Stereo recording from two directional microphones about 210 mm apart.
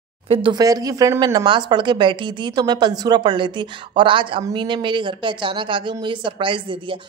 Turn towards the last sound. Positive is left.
turn(degrees=-25)  # may be behind; listen again after turning